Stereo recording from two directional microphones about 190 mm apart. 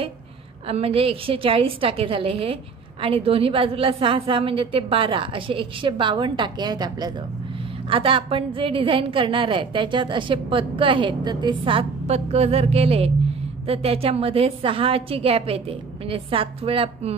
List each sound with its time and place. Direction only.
0.7 s a woman's voice: 30° right (ahead or behind)